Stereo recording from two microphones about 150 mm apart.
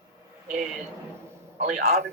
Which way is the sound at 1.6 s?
50° right (ahead or behind).